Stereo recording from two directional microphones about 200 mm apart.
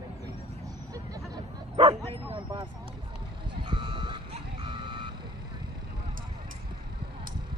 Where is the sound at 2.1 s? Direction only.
25° right (ahead or behind).